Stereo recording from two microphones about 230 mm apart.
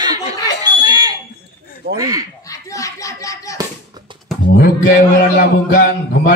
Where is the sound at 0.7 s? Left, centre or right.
Centre.